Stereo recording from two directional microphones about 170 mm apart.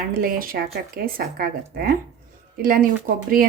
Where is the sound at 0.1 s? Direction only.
60° right (ahead or behind).